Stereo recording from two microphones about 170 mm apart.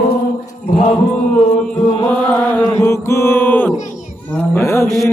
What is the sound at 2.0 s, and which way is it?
Chant, 10° left (ahead or behind).